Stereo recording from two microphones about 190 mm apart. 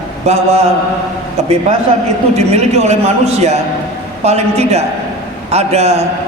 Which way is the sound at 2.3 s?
35° right (ahead or behind).